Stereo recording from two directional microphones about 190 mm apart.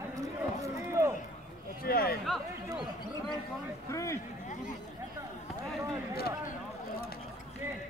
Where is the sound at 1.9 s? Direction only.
50° left (ahead or behind).